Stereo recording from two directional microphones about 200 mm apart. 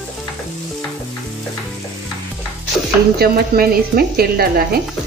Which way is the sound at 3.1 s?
50° right (ahead or behind).